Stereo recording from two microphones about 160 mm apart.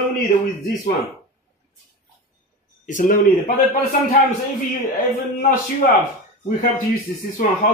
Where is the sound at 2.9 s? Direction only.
55° left (ahead or behind).